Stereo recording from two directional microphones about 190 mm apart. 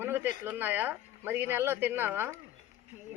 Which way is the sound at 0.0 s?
10° right (ahead or behind).